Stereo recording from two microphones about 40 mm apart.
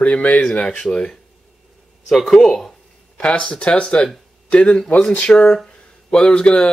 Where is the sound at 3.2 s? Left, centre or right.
Left.